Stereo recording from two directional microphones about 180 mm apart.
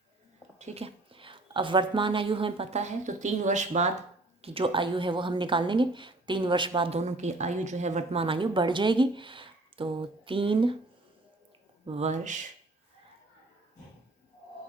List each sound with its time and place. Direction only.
0.6 s a woman's voice: 35° right (ahead or behind)
11.9 s a woman's voice: 35° right (ahead or behind)